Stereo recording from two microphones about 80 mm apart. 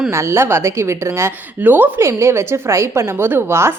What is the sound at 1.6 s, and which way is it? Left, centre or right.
Speech, right.